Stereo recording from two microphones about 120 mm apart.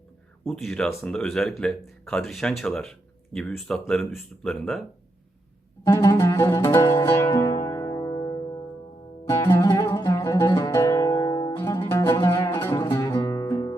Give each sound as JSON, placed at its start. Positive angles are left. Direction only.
{"t": 0.4, "sound": "speech", "side_deg": 0}
{"t": 5.8, "sound": "music", "side_deg": 30}